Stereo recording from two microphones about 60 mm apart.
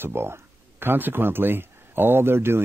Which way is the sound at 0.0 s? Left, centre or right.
Right.